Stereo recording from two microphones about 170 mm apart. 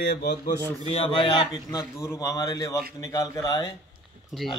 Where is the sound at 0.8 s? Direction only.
35° left (ahead or behind).